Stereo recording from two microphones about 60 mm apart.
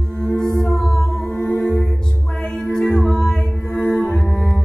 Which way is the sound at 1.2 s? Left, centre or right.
Left.